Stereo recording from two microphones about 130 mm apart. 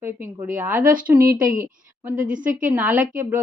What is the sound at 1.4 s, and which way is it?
A woman's voice, 90° right.